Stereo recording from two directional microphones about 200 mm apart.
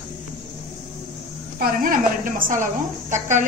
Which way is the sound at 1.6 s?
45° right (ahead or behind).